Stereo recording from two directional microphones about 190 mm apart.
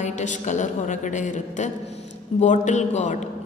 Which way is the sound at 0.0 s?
40° left (ahead or behind).